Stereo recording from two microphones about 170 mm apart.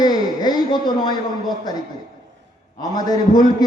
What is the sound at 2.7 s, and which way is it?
Speech, 25° left (ahead or behind).